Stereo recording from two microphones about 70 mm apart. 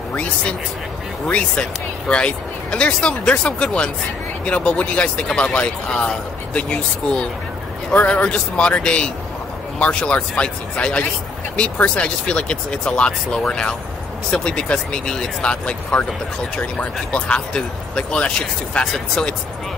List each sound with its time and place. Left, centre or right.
0.1 s speech: centre